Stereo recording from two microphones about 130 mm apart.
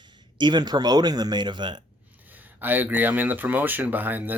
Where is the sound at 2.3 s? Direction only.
15° right (ahead or behind).